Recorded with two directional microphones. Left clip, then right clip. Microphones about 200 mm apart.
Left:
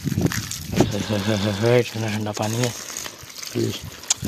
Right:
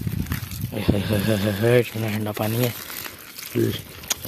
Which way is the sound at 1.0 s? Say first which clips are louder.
Even; 5° right (ahead or behind).